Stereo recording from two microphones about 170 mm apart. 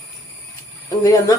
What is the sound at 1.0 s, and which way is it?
Speech, 20° left (ahead or behind).